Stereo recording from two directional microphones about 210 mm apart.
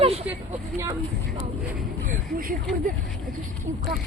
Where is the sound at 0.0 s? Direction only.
30° right (ahead or behind).